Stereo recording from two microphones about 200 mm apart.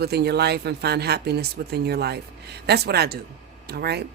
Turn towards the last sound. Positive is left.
turn(degrees=-55)  # may be behind; listen again after turning